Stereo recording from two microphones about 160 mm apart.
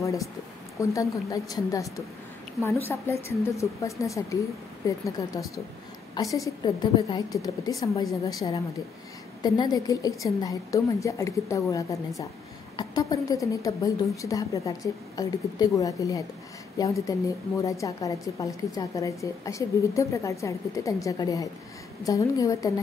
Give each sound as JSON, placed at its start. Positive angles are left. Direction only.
{"t": 0.7, "sound": "a woman's voice", "side_deg": 20}